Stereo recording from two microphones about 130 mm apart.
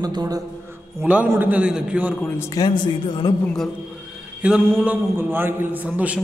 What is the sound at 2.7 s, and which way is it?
Speech, 35° left (ahead or behind).